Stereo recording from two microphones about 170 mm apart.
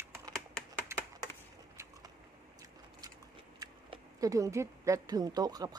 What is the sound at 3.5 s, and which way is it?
A woman's voice, 20° right (ahead or behind).